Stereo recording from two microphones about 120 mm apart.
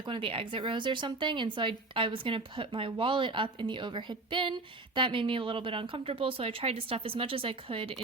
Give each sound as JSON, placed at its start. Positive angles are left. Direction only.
{"t": 0.0, "sound": "speech", "side_deg": -45}